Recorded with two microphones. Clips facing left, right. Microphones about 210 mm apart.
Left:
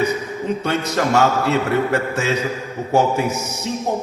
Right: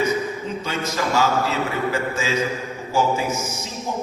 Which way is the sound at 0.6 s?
65° left (ahead or behind).